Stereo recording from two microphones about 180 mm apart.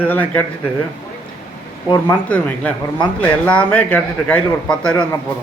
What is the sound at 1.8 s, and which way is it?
Speech, 20° left (ahead or behind).